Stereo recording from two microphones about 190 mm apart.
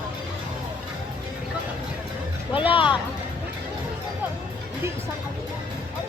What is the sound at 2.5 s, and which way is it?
Music, 30° left (ahead or behind).